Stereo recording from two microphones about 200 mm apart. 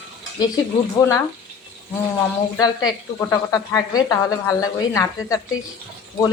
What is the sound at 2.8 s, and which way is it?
Speech, 15° left (ahead or behind).